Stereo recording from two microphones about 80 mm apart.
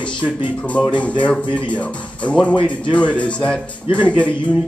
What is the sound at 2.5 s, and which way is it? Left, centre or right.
Speech, left.